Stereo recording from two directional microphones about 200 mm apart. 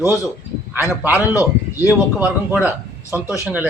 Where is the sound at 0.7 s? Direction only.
10° right (ahead or behind).